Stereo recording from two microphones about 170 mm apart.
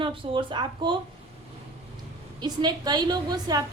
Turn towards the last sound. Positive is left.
turn(degrees=-25)  # may be behind; listen again after turning